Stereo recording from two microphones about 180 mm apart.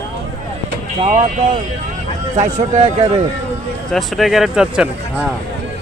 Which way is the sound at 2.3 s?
40° right (ahead or behind).